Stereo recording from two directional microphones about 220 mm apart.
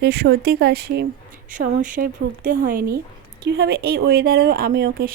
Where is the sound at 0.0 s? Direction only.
50° right (ahead or behind).